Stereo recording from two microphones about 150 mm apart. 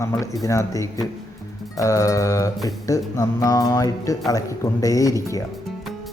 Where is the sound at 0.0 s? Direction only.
20° left (ahead or behind).